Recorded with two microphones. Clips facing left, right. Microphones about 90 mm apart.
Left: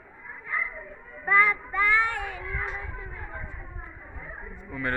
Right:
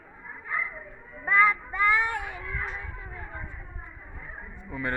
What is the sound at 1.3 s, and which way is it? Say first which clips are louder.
Child singing: even; 10° right (ahead or behind).